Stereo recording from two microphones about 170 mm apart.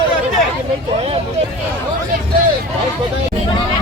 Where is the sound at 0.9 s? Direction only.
35° right (ahead or behind).